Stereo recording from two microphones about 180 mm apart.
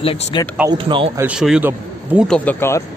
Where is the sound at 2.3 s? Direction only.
10° left (ahead or behind).